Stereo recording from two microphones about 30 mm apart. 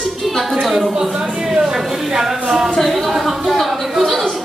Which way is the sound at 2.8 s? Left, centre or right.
Centre.